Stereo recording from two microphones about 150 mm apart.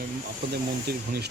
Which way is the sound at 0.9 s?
90° right.